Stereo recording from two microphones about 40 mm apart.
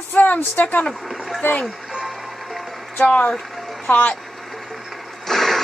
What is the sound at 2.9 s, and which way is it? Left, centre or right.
Speech, left.